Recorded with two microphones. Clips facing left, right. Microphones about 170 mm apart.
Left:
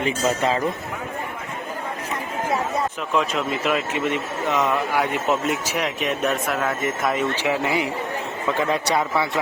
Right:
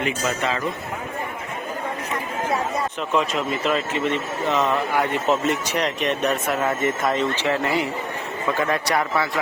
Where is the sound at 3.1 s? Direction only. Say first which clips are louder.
Right 1 dB; centre (ahead or behind); by 9.0 s 20° left (ahead or behind).